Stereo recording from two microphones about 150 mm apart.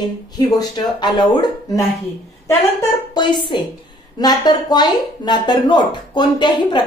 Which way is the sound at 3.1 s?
30° left (ahead or behind).